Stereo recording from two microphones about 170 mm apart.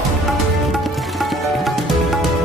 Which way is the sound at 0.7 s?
Centre (ahead or behind).